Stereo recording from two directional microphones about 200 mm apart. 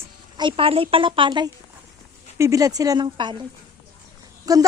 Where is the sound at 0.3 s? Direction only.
25° right (ahead or behind).